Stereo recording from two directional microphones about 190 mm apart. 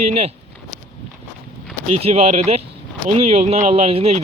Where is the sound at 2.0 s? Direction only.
35° right (ahead or behind).